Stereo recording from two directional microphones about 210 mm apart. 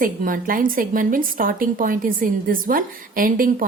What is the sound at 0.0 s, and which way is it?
A woman's voice, 40° right (ahead or behind).